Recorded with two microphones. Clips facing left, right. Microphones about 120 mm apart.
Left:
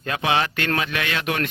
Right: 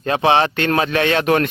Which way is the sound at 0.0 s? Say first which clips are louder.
Right 7 dB; 30° right (ahead or behind).